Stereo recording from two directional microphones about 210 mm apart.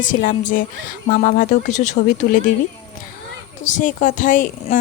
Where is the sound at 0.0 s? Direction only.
40° left (ahead or behind).